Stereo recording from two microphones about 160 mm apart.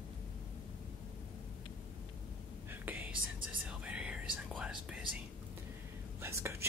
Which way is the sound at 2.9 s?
10° right (ahead or behind).